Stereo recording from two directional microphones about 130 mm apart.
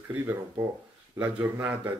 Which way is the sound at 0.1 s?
15° right (ahead or behind).